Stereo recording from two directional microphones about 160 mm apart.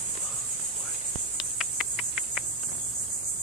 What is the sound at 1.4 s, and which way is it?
Cricket, centre (ahead or behind).